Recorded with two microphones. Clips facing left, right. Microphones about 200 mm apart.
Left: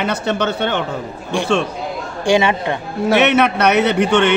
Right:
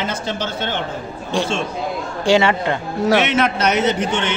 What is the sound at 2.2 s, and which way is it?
Speech, 15° left (ahead or behind).